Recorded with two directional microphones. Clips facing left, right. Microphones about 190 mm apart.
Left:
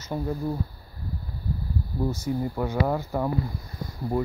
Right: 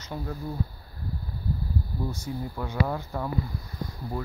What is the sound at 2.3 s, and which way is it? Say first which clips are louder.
Speech: left 8 dB; 55° left (ahead or behind).